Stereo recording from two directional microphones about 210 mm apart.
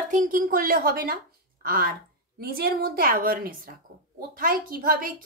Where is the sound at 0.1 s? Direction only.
40° right (ahead or behind).